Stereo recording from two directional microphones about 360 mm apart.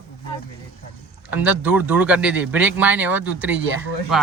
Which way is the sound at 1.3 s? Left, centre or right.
Centre.